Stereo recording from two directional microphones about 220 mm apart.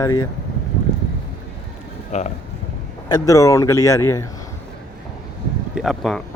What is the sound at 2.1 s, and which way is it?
Speech, 30° left (ahead or behind).